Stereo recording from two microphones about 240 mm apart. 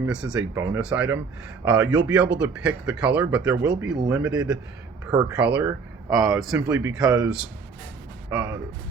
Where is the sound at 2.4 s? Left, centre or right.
Centre.